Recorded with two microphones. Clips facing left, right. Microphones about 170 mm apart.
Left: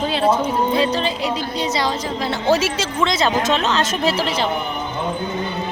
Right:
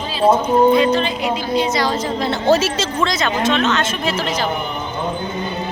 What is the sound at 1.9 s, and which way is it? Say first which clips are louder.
A woman's voice: right 3 dB; 10° left (ahead or behind).